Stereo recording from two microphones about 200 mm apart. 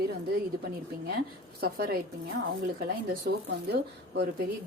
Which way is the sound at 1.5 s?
50° right (ahead or behind).